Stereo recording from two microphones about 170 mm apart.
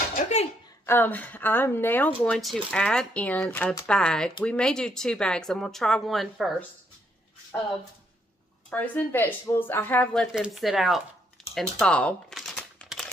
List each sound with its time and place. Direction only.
0.1 s a sound: 40° left (ahead or behind)
0.8 s speech: 10° left (ahead or behind)
8.6 s speech: 10° left (ahead or behind)
10.3 s speech: centre (ahead or behind)
11.4 s typing: centre (ahead or behind)